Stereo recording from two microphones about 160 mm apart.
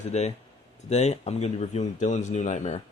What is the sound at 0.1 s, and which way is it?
Speech, 45° left (ahead or behind).